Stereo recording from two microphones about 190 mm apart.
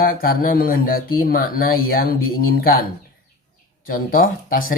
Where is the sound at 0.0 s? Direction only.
50° left (ahead or behind).